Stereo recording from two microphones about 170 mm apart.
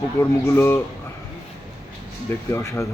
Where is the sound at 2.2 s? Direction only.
15° left (ahead or behind).